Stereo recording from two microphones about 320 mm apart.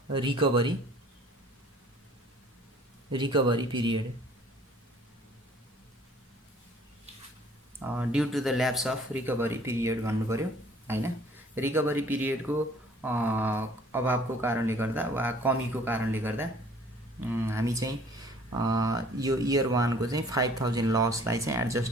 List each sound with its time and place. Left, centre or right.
0.1 s speech: centre
3.1 s speech: centre
7.9 s speech: centre